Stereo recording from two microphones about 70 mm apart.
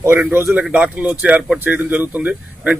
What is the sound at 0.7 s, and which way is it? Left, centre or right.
Speech, centre.